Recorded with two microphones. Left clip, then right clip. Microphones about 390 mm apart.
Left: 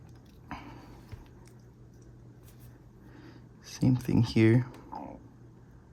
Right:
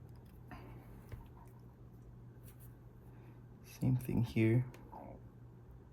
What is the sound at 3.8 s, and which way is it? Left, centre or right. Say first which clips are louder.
Speech: left 11 dB; left.